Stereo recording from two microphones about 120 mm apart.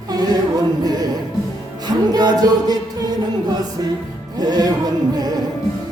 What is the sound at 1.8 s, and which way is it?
Music, 35° right (ahead or behind).